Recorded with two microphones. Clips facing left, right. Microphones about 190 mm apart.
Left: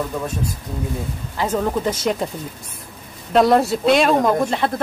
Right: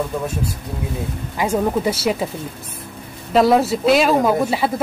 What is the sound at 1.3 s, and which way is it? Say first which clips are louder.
Speech: right 2 dB; 10° right (ahead or behind).